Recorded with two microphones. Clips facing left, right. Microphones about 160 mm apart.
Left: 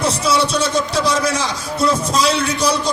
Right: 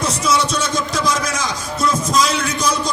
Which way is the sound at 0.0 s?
30° left (ahead or behind).